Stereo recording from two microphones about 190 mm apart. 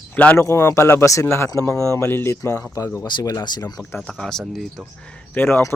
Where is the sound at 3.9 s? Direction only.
5° left (ahead or behind).